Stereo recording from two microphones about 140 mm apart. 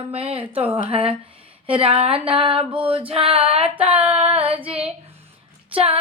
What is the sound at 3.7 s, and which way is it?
Female singing, 45° right (ahead or behind).